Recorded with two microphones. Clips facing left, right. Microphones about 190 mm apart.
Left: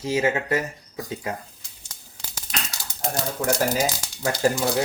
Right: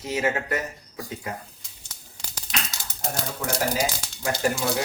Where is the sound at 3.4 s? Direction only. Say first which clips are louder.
Left 6 dB; 50° left (ahead or behind).